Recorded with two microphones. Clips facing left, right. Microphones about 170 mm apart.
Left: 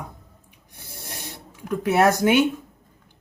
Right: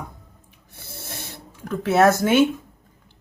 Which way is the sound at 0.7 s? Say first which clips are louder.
Right 2 dB; 15° left (ahead or behind).